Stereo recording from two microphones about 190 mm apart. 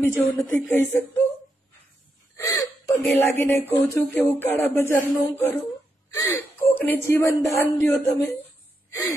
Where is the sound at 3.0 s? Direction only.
10° left (ahead or behind).